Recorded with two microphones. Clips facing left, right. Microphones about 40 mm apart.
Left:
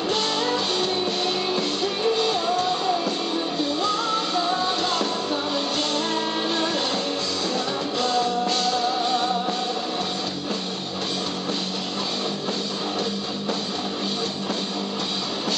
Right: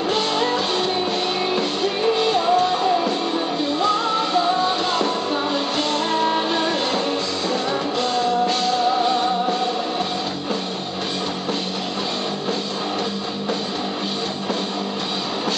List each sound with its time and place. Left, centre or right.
0.1 s music: centre
8.0 s music: centre